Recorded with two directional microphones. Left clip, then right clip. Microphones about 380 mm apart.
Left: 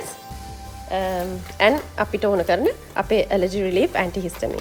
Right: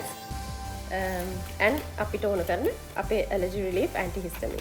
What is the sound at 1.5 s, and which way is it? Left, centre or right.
Speech, left.